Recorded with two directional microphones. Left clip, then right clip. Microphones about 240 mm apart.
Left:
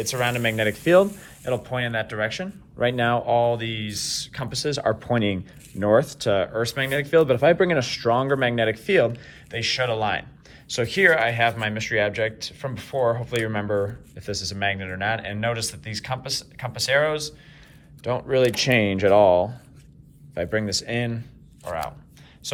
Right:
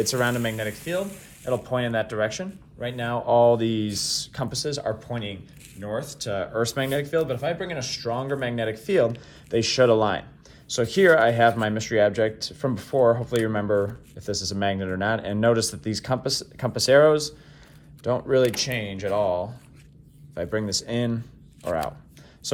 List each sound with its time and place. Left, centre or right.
0.0 s speech: centre
1.5 s speech: centre
2.7 s speech: centre
7.1 s speech: centre
9.2 s speech: centre
22.4 s speech: centre